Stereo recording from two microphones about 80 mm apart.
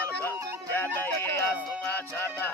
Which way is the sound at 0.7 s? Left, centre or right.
Left.